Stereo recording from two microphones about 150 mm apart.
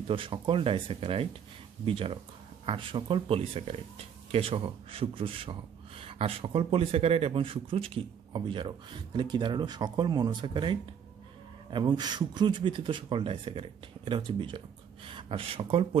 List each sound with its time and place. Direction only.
0.1 s a man's voice: 35° right (ahead or behind)